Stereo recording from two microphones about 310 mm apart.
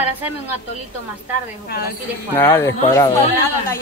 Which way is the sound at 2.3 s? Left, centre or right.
Centre.